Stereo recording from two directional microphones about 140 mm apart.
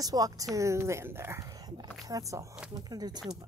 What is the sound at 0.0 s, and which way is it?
Speech, 25° right (ahead or behind).